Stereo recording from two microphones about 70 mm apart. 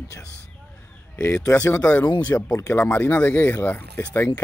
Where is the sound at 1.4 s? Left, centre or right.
Left.